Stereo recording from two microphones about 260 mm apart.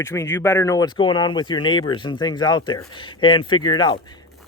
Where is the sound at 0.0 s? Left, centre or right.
Centre.